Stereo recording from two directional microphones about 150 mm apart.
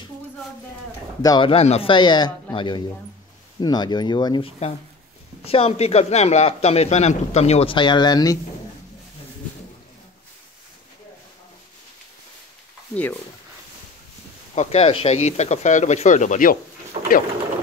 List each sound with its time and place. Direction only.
1.2 s speech: 25° left (ahead or behind)
1.5 s a man's voice: 40° left (ahead or behind)
5.4 s a man's voice: 40° left (ahead or behind)
12.9 s speech: 10° left (ahead or behind)
14.5 s a man's voice: 45° left (ahead or behind)
17.0 s mechanisms: 40° right (ahead or behind)